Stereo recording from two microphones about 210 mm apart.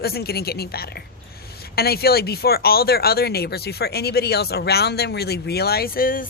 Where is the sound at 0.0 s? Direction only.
50° left (ahead or behind).